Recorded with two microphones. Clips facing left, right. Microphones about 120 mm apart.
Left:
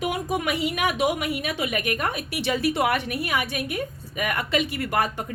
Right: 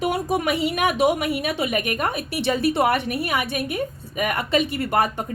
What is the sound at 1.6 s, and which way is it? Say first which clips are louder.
A woman's voice: right 3 dB; 30° right (ahead or behind).